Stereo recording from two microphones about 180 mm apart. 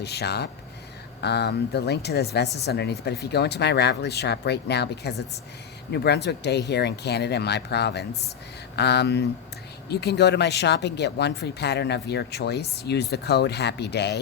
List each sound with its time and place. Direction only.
0.0 s speech: 65° left (ahead or behind)